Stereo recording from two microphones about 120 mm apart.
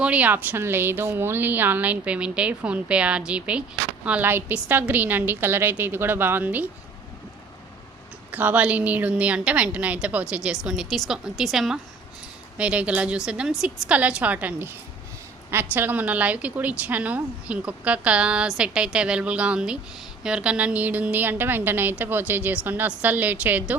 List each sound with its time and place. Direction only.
0.0 s a woman's voice: 10° right (ahead or behind)
8.3 s a woman's voice: 15° right (ahead or behind)